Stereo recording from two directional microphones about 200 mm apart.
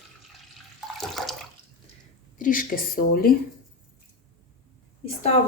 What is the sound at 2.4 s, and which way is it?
Speech, 45° left (ahead or behind).